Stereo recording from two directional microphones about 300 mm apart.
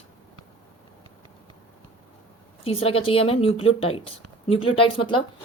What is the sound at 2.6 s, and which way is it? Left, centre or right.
A woman's voice, centre.